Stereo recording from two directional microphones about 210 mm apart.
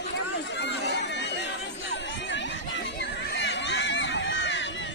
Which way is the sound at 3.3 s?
60° left (ahead or behind).